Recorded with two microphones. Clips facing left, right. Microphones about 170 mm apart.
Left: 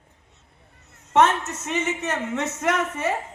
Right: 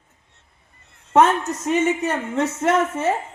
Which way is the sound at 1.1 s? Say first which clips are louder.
Right 3 dB; 35° right (ahead or behind).